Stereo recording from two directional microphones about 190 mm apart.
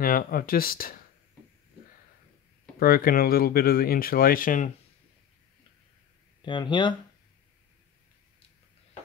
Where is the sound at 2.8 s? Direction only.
50° left (ahead or behind).